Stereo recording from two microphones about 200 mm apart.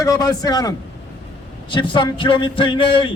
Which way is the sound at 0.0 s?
20° left (ahead or behind).